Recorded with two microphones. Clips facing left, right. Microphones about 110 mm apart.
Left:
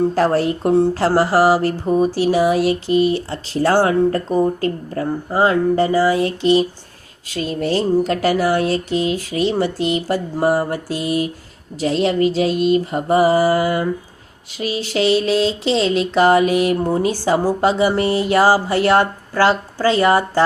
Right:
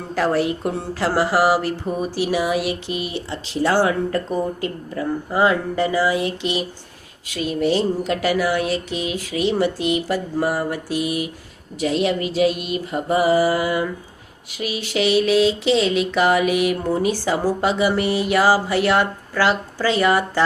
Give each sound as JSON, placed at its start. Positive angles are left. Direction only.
{"t": 0.1, "sound": "speech", "side_deg": 35}